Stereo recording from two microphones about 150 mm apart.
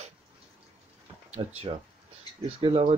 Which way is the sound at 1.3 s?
45° right (ahead or behind).